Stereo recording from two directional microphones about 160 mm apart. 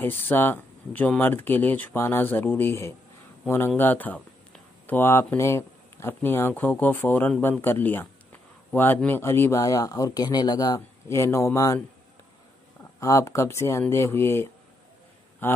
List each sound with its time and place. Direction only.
0.0 s speech: 15° left (ahead or behind)
13.0 s speech: 20° left (ahead or behind)